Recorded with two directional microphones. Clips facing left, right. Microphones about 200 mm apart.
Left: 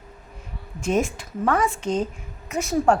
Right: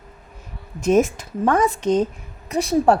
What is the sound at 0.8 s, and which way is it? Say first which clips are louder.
A woman's voice: right 6 dB; 40° right (ahead or behind).